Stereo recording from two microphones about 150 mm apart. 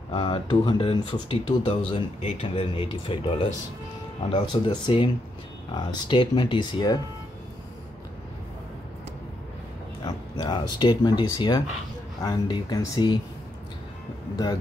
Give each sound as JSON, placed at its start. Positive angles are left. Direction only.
{"t": 0.1, "sound": "speech", "side_deg": 35}
{"t": 10.0, "sound": "speech", "side_deg": 30}
{"t": 14.3, "sound": "speech", "side_deg": 25}